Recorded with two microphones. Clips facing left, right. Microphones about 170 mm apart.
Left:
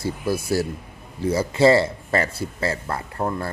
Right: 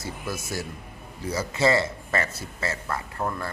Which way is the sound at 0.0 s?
30° left (ahead or behind).